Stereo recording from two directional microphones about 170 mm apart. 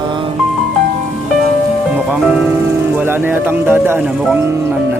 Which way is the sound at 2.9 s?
10° right (ahead or behind).